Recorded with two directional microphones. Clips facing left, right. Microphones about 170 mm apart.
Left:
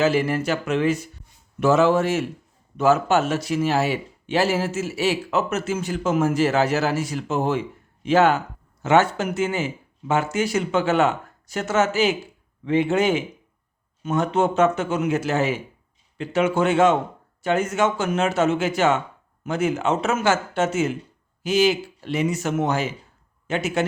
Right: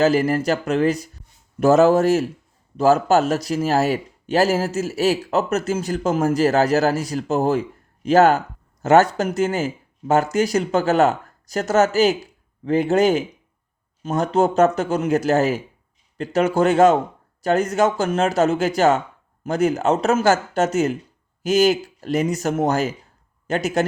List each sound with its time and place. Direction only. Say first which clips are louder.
0.0 s a man's voice: right 3 dB; 40° right (ahead or behind)